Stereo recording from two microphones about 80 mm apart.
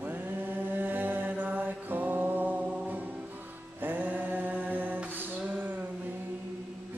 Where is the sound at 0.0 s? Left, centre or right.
Right.